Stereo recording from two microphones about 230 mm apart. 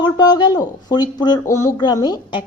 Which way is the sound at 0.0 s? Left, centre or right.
Centre.